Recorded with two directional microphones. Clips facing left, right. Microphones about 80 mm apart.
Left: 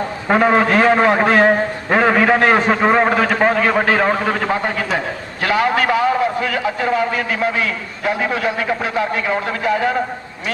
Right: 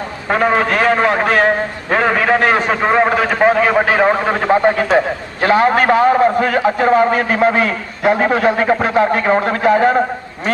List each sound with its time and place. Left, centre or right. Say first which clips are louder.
0.3 s a man's voice: left 1 dB; centre; by 10.0 s right